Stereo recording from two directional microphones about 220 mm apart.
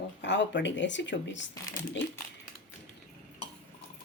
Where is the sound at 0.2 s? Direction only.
55° left (ahead or behind).